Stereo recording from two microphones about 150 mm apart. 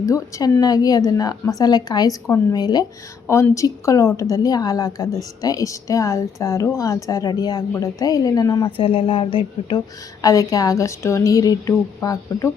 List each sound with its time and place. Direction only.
0.0 s speech: 20° left (ahead or behind)